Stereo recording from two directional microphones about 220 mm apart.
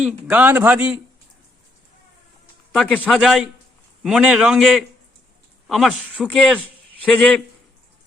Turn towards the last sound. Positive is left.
turn(degrees=5)  # may be behind; listen again after turning